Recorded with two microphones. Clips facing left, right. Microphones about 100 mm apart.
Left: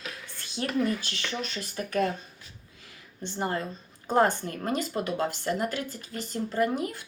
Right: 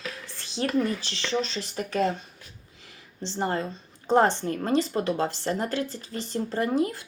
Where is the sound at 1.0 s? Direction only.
25° right (ahead or behind).